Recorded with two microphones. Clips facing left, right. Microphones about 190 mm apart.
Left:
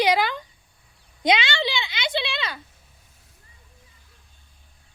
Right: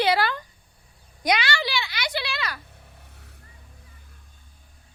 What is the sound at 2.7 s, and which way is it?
Vehicle, 65° right (ahead or behind).